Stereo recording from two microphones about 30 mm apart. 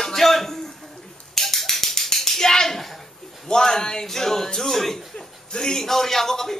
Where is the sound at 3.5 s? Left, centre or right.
Left.